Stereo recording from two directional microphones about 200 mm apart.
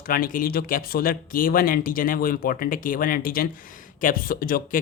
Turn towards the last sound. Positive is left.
turn(degrees=45)  # may be behind; listen again after turning